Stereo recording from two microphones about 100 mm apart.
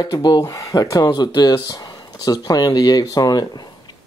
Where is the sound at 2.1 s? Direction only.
40° left (ahead or behind).